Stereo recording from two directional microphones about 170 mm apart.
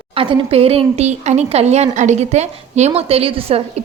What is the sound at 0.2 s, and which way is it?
Speech, 35° right (ahead or behind).